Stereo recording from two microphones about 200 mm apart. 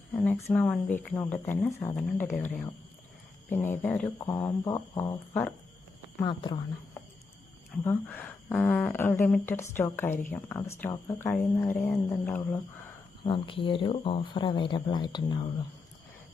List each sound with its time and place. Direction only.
0.2 s speech: 5° left (ahead or behind)
4.2 s speech: 20° left (ahead or behind)
6.1 s speech: 25° left (ahead or behind)
7.9 s speech: 10° left (ahead or behind)
13.2 s speech: 25° left (ahead or behind)